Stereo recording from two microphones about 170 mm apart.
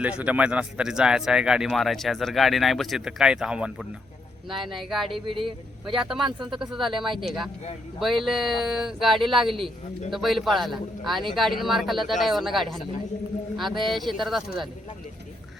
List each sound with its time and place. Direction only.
0.0 s speech: 5° right (ahead or behind)
5.2 s speech: 30° right (ahead or behind)
5.8 s speech: 5° right (ahead or behind)
13.8 s speech: centre (ahead or behind)